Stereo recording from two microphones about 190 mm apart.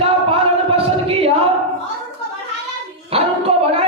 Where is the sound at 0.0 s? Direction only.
30° right (ahead or behind).